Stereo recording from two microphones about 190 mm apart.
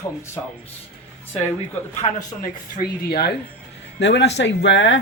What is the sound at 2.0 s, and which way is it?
Speech, 30° left (ahead or behind).